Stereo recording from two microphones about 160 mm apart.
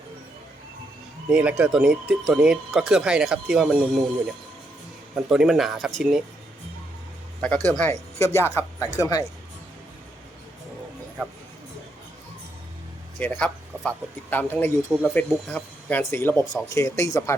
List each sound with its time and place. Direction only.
1.3 s speech: 10° right (ahead or behind)
5.1 s speech: centre (ahead or behind)
7.4 s speech: 5° left (ahead or behind)
13.1 s speech: 10° left (ahead or behind)